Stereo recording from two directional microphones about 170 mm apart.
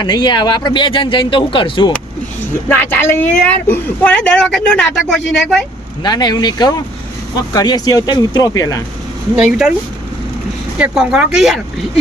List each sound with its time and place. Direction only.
0.0 s speech: 25° left (ahead or behind)
2.6 s speech: 10° left (ahead or behind)
6.0 s speech: 25° left (ahead or behind)
9.3 s speech: 5° right (ahead or behind)
10.8 s speech: 5° right (ahead or behind)